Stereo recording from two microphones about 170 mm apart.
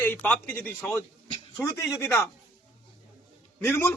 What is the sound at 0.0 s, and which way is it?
A man's voice, 10° left (ahead or behind).